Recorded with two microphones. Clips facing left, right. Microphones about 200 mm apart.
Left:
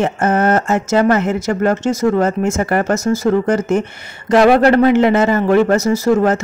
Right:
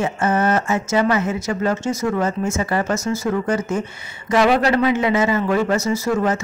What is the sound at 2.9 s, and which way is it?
Speech, 40° left (ahead or behind).